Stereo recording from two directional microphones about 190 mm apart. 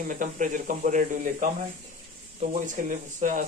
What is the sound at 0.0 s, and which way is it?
Speech, 40° right (ahead or behind).